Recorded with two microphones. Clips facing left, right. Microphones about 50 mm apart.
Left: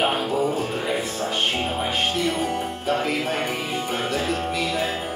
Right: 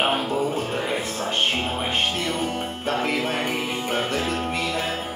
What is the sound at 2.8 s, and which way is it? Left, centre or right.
Music, right.